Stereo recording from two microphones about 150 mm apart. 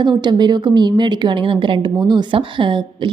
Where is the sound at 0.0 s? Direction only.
30° right (ahead or behind).